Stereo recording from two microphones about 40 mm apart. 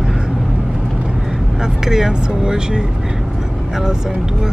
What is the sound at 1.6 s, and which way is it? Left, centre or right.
Speech, centre.